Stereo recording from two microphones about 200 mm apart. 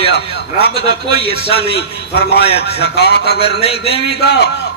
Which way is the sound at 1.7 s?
55° left (ahead or behind).